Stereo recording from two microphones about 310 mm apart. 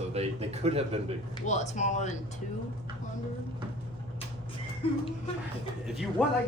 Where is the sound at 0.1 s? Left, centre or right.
Centre.